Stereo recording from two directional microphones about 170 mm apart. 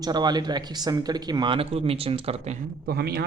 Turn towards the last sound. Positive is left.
turn(degrees=-70)  # may be behind; listen again after turning